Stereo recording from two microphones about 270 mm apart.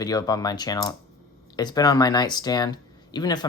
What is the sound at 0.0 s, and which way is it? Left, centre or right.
Speech, centre.